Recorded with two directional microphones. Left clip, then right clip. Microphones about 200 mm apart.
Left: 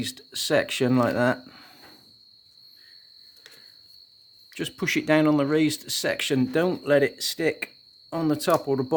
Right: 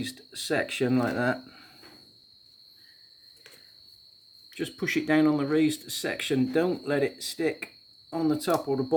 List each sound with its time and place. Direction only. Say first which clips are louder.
0.0 s speech: left 5 dB; 55° left (ahead or behind)
4.5 s speech: left 3 dB; 50° left (ahead or behind)